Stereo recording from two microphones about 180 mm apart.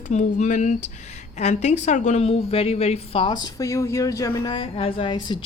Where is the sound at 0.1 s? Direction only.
40° left (ahead or behind).